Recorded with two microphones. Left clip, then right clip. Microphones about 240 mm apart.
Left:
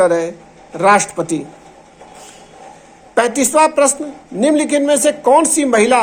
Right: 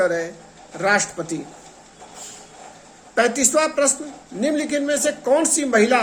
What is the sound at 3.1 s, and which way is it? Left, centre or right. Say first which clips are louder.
Speech: left 5 dB; left.